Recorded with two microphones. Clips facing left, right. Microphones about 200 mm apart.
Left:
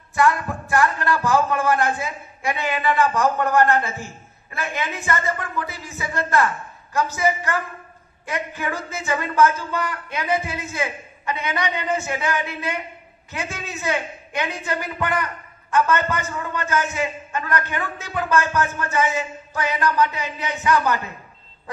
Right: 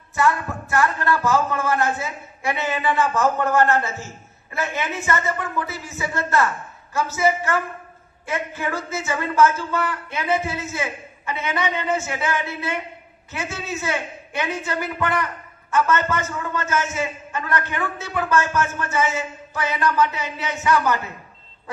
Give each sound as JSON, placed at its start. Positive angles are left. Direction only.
{"t": 0.1, "sound": "speech", "side_deg": 15}